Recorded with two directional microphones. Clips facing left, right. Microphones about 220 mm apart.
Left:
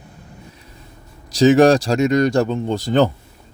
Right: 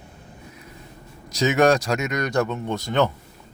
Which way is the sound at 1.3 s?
30° left (ahead or behind).